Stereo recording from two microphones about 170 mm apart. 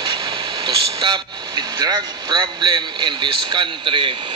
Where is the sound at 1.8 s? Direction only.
25° right (ahead or behind).